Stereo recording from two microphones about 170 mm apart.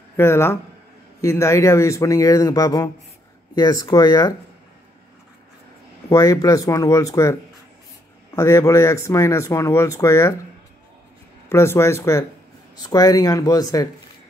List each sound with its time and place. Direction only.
0.2 s speech: 15° left (ahead or behind)
6.0 s speech: 20° left (ahead or behind)
8.4 s speech: 15° left (ahead or behind)
11.4 s speech: 15° left (ahead or behind)